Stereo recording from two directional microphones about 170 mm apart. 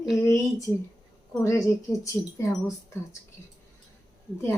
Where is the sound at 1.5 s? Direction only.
20° left (ahead or behind).